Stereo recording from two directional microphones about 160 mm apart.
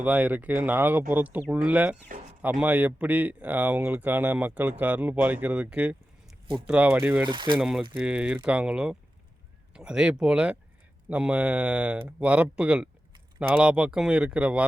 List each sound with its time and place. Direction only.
0.0 s speech: 10° right (ahead or behind)
7.3 s speech: 30° right (ahead or behind)
7.6 s speech: 5° right (ahead or behind)